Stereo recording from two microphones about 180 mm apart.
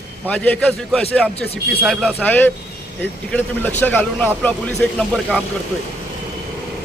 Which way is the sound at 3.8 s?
10° left (ahead or behind).